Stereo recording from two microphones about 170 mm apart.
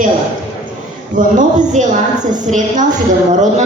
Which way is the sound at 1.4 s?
45° right (ahead or behind).